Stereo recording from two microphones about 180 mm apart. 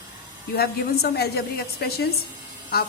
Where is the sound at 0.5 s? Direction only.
60° left (ahead or behind).